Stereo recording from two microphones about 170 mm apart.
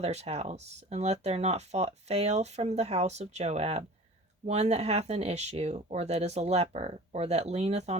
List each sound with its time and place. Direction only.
0.0 s speech: 40° right (ahead or behind)